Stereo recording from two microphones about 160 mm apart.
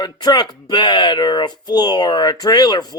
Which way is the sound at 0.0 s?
25° left (ahead or behind).